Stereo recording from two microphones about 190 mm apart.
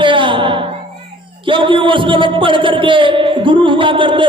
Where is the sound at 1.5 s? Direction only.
25° right (ahead or behind).